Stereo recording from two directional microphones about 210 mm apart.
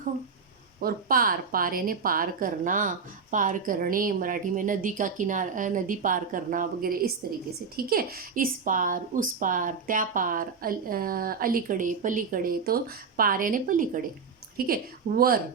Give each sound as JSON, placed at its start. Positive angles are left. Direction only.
{"t": 0.8, "sound": "a woman's voice", "side_deg": -45}